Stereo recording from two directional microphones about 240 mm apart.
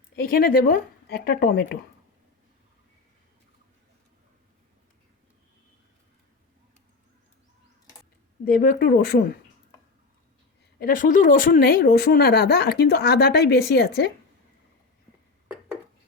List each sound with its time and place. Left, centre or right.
0.2 s speech: left
8.4 s speech: left
10.8 s speech: left